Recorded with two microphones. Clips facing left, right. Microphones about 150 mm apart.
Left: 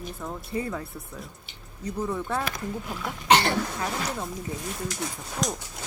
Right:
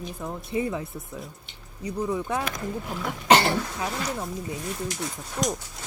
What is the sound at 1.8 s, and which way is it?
Speech, 10° right (ahead or behind).